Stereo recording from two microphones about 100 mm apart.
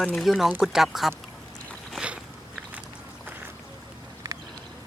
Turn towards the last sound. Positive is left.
turn(degrees=-35)  # may be behind; listen again after turning